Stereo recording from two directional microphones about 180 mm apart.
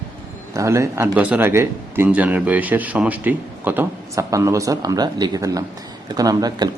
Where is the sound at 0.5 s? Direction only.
15° right (ahead or behind).